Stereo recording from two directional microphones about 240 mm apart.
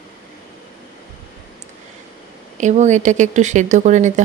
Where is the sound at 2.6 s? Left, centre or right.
Right.